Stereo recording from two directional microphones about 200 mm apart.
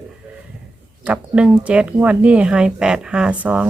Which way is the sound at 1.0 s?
5° right (ahead or behind).